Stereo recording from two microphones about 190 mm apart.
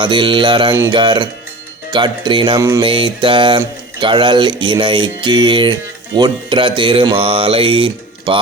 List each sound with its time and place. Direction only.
0.0 s speech: 25° right (ahead or behind)